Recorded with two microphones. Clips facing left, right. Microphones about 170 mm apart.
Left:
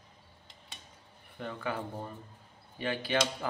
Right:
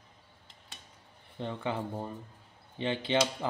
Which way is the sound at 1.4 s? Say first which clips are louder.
Right 2 dB; 25° right (ahead or behind).